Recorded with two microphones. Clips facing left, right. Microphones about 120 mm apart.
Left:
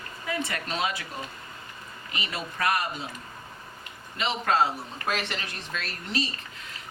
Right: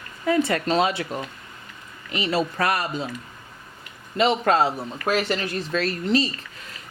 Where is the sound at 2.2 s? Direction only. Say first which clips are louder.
Right 9 dB; 35° right (ahead or behind).